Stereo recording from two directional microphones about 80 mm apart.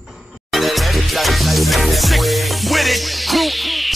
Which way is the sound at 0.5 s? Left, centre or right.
Centre.